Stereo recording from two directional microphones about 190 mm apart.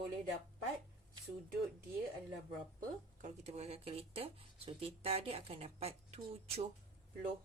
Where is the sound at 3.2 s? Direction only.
35° right (ahead or behind).